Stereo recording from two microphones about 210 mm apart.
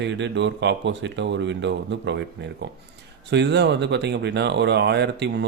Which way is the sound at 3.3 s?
55° right (ahead or behind).